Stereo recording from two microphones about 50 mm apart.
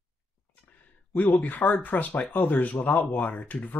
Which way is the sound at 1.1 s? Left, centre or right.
Left.